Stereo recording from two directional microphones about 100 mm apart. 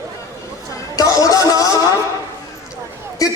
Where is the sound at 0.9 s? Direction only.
35° left (ahead or behind).